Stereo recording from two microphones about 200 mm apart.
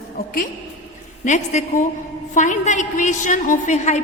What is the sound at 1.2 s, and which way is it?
A woman's voice, 40° left (ahead or behind).